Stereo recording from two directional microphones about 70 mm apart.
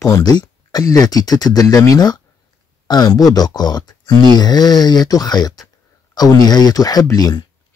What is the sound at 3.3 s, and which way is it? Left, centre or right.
Speech, left.